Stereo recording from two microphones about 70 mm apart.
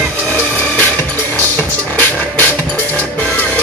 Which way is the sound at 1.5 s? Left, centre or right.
Left.